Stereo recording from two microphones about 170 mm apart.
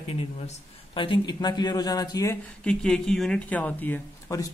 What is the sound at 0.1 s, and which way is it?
Speech, 30° left (ahead or behind).